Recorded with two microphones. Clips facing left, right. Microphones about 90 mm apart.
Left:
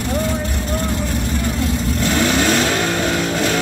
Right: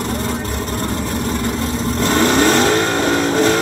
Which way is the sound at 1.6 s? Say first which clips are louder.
Right 1 dB; 40° right (ahead or behind).